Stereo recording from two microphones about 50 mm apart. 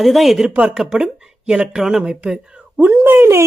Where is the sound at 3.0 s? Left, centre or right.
Right.